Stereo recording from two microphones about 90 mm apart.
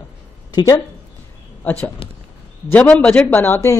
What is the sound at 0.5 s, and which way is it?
Speech, 50° left (ahead or behind).